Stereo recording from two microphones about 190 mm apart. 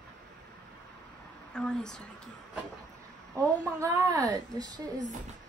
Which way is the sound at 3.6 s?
15° right (ahead or behind).